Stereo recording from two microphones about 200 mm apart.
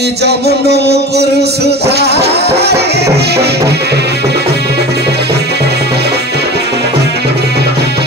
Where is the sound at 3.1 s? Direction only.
55° right (ahead or behind).